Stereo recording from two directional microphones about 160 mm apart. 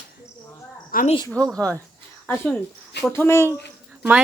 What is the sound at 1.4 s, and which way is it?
Speech, 20° right (ahead or behind).